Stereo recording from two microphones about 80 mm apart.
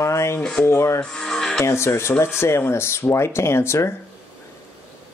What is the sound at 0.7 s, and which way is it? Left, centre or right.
Speech, left.